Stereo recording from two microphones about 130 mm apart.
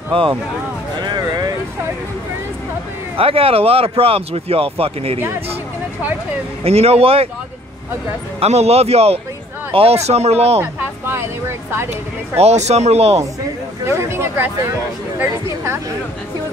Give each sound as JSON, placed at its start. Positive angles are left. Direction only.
{"t": 0.1, "sound": "speech", "side_deg": -45}
{"t": 1.0, "sound": "a sound", "side_deg": -30}
{"t": 3.2, "sound": "speech", "side_deg": -45}
{"t": 6.6, "sound": "speech", "side_deg": -50}
{"t": 8.4, "sound": "speech", "side_deg": -55}
{"t": 10.6, "sound": "a sound", "side_deg": -20}
{"t": 12.4, "sound": "speech", "side_deg": -55}
{"t": 13.8, "sound": "speech", "side_deg": -20}